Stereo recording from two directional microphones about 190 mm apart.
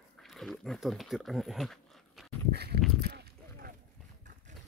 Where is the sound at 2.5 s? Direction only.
60° right (ahead or behind).